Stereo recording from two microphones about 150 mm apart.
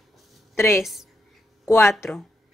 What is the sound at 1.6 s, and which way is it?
Speech, 15° left (ahead or behind).